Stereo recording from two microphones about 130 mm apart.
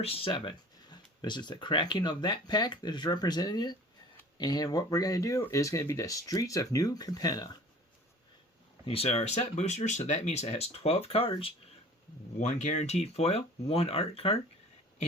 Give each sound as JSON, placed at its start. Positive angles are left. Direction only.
{"t": 0.0, "sound": "speech", "side_deg": 45}
{"t": 8.9, "sound": "speech", "side_deg": 50}
{"t": 12.4, "sound": "speech", "side_deg": 65}